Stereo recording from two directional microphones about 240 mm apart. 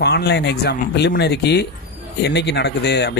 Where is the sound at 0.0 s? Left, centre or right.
Left.